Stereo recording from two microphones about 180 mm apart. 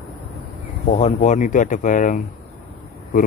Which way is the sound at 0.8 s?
40° left (ahead or behind).